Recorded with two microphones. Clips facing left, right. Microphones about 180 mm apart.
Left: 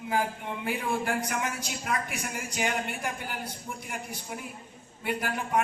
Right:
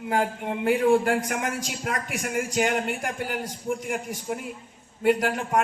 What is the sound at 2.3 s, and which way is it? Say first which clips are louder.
A man's voice: right 7 dB; 85° right.